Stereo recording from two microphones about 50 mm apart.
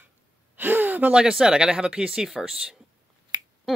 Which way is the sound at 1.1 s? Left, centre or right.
Centre.